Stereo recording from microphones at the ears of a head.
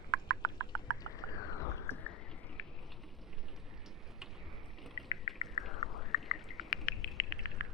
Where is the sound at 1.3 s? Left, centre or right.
Left.